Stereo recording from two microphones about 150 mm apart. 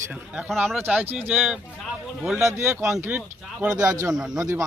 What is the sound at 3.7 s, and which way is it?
Speech, 25° right (ahead or behind).